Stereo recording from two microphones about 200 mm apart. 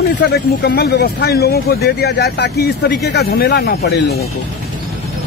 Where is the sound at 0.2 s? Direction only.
55° left (ahead or behind).